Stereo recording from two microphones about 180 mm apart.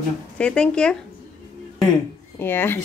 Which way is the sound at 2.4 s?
10° left (ahead or behind).